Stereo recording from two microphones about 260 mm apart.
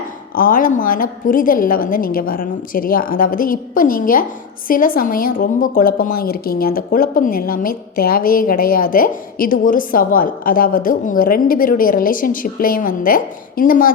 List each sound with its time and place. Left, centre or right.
0.3 s a woman's voice: left